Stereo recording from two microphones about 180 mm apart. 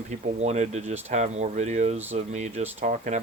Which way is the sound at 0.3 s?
40° right (ahead or behind).